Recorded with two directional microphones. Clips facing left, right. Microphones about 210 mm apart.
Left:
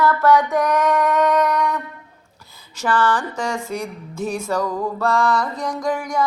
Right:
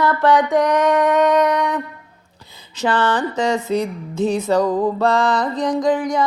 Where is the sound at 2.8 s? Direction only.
20° right (ahead or behind).